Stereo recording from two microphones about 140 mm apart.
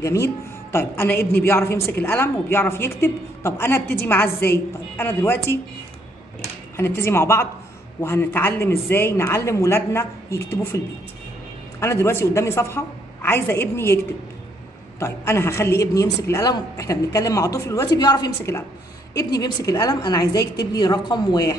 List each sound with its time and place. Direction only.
0.0 s a woman's voice: 20° left (ahead or behind)
6.8 s a woman's voice: 15° left (ahead or behind)
11.8 s a woman's voice: 20° left (ahead or behind)
15.0 s a woman's voice: 20° left (ahead or behind)